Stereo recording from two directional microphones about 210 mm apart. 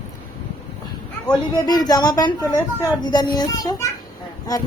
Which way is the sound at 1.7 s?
20° left (ahead or behind).